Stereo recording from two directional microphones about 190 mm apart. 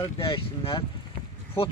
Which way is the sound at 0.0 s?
30° left (ahead or behind).